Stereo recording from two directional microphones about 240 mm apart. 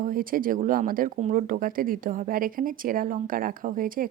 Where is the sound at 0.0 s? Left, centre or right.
Right.